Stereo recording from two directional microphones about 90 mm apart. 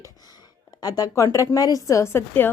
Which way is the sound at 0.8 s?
45° left (ahead or behind).